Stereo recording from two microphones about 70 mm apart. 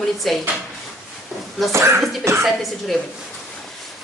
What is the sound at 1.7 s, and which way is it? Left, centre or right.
Speech, right.